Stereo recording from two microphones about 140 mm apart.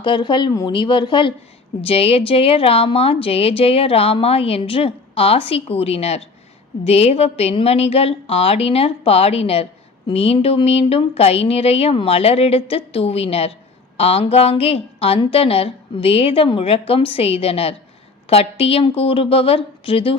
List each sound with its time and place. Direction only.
0.0 s a woman's voice: 35° left (ahead or behind)